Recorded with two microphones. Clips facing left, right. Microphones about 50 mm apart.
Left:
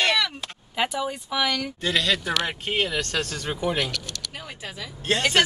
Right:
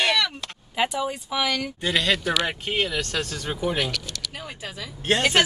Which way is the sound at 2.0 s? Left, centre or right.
Right.